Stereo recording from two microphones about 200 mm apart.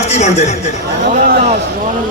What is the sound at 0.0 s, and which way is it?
Speech, 35° left (ahead or behind).